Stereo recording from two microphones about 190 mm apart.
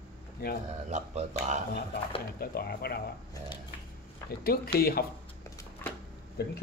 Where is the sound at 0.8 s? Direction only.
35° right (ahead or behind).